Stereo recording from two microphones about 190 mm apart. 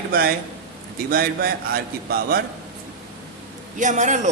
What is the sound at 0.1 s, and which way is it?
A man's voice, 50° right (ahead or behind).